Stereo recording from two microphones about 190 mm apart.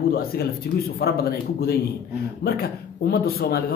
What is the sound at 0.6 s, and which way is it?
Speech, 55° left (ahead or behind).